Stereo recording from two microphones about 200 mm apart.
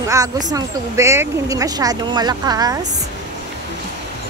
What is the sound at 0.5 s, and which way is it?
Speech, 15° right (ahead or behind).